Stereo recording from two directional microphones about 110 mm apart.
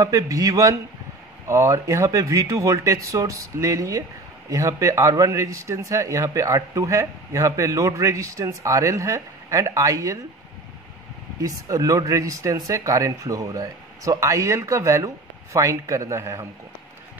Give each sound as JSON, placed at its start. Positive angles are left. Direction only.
{"t": 0.0, "sound": "a man's voice", "side_deg": -30}
{"t": 11.4, "sound": "a man's voice", "side_deg": -30}